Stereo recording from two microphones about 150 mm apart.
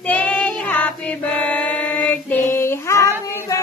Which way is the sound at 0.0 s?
10° left (ahead or behind).